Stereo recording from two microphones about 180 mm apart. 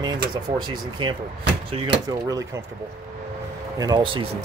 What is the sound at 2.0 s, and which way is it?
Speech, 20° right (ahead or behind).